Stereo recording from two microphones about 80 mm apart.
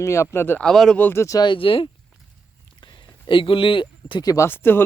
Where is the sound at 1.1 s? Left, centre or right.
Left.